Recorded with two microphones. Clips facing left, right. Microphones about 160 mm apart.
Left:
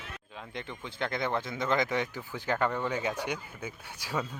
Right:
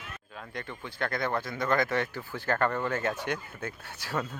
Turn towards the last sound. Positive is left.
turn(degrees=10)  # may be behind; listen again after turning